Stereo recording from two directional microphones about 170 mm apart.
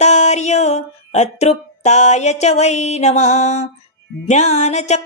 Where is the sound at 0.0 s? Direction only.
40° left (ahead or behind).